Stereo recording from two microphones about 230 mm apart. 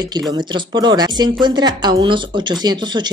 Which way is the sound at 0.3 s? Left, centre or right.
Centre.